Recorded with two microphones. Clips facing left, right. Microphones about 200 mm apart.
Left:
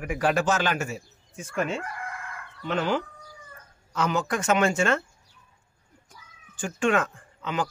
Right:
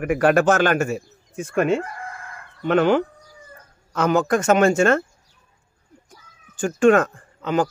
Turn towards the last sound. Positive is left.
turn(degrees=-45)  # may be behind; listen again after turning